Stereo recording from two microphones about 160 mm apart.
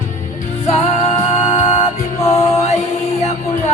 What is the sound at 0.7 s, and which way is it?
Music, 40° left (ahead or behind).